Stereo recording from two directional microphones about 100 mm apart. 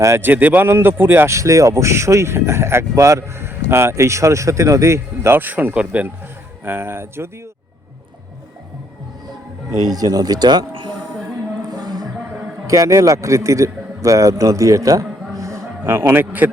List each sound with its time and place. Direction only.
0.0 s speech: 25° right (ahead or behind)
9.7 s a man's voice: 40° right (ahead or behind)
11.7 s music: 45° right (ahead or behind)
12.6 s a man's voice: 35° right (ahead or behind)
15.4 s a sound: 30° right (ahead or behind)